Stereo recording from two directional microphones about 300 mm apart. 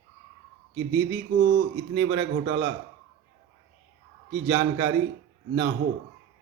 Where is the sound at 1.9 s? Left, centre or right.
Centre.